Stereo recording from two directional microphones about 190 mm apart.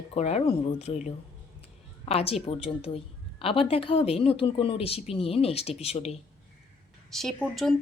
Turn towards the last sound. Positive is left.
turn(degrees=0)  # may be behind; listen again after turning